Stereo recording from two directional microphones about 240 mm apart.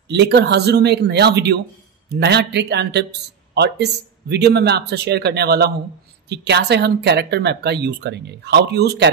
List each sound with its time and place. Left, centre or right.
0.1 s a man's voice: right